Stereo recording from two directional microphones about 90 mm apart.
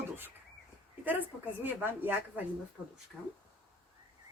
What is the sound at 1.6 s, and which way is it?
Speech, 20° right (ahead or behind).